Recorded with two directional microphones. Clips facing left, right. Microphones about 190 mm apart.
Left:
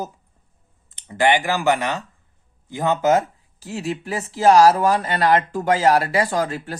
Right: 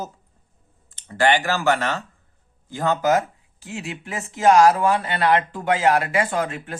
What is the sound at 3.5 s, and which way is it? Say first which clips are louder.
Speech: left 6 dB; 35° left (ahead or behind).